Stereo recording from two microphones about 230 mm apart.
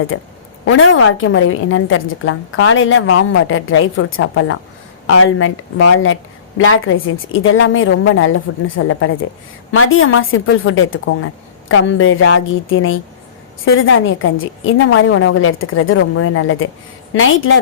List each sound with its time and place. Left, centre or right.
0.1 s a woman's voice: left